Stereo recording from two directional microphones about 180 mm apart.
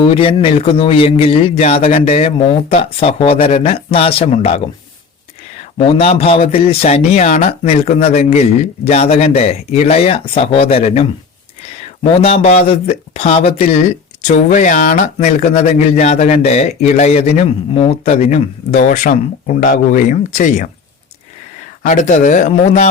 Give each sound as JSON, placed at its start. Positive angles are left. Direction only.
{"t": 0.0, "sound": "speech", "side_deg": 30}
{"t": 21.8, "sound": "speech", "side_deg": 45}